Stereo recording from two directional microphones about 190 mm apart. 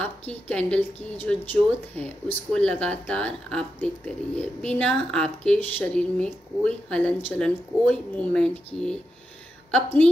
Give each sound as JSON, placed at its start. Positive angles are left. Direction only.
{"t": 0.3, "sound": "a woman's voice", "side_deg": 5}